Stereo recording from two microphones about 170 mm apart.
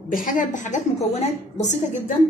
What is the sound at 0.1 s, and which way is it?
A woman's voice, 55° left (ahead or behind).